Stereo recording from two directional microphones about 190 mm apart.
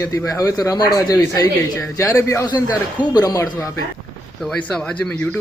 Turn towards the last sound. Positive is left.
turn(degrees=5)  # may be behind; listen again after turning